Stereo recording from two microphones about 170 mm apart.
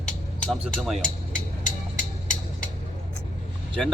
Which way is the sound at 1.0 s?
50° left (ahead or behind).